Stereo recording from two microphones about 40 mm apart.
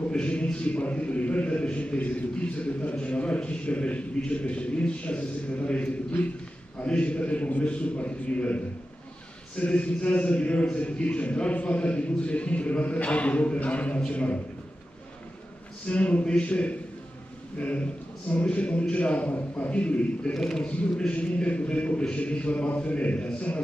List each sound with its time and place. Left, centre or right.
0.1 s a man's voice: left
9.7 s a man's voice: left
15.9 s a man's voice: left
20.3 s a man's voice: centre
21.1 s a man's voice: left